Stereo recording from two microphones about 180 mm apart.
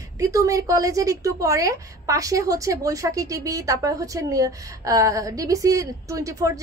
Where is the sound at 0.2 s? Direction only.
20° right (ahead or behind).